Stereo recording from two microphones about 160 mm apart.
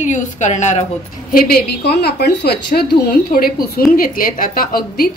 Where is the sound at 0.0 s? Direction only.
50° left (ahead or behind).